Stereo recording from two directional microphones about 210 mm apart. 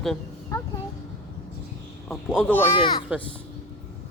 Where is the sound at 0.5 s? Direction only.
15° left (ahead or behind).